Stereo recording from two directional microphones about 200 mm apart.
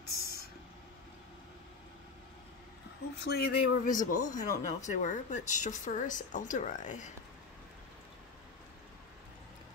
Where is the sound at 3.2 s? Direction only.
50° left (ahead or behind).